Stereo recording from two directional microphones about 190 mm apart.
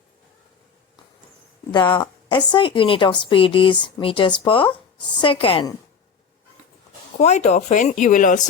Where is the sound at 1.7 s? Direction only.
25° left (ahead or behind).